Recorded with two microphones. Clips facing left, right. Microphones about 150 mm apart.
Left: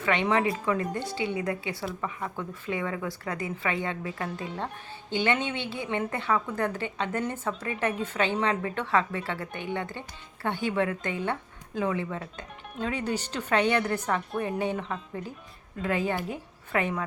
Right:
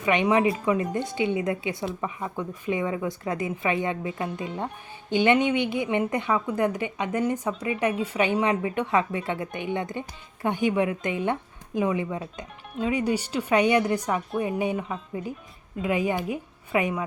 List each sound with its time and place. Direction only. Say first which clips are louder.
0.0 s a woman's voice: right 4 dB; 15° right (ahead or behind)